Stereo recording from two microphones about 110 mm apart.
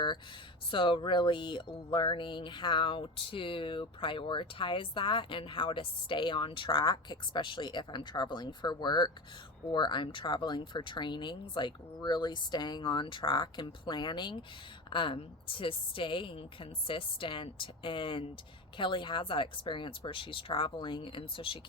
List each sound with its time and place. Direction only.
0.7 s speech: 50° left (ahead or behind)